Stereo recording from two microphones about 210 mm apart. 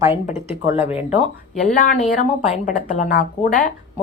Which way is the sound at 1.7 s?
40° left (ahead or behind).